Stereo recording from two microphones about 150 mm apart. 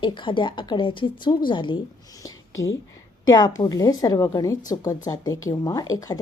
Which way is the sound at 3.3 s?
25° left (ahead or behind).